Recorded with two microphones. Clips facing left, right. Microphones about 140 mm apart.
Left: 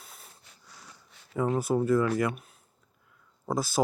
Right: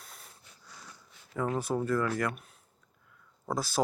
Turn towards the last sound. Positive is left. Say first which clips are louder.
# left 3 dB
turn(degrees=5)  # may be behind; listen again after turning